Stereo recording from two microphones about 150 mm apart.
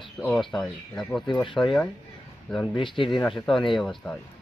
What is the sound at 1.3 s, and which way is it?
Speech, 30° left (ahead or behind).